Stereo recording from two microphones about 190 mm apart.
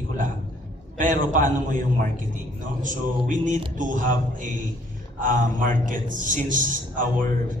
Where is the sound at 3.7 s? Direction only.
45° right (ahead or behind).